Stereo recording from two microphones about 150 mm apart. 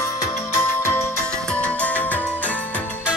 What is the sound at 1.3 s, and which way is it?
Music, 5° left (ahead or behind).